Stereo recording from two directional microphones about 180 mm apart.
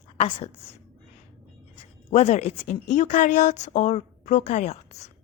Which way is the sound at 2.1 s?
35° left (ahead or behind).